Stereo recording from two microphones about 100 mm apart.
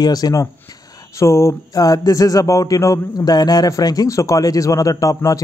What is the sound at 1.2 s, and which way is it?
Speech, 25° left (ahead or behind).